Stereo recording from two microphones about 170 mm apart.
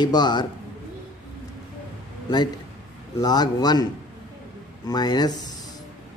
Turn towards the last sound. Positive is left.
turn(degrees=25)  # may be behind; listen again after turning